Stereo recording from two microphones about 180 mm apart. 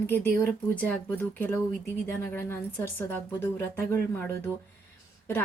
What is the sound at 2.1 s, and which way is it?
A woman's voice, 10° left (ahead or behind).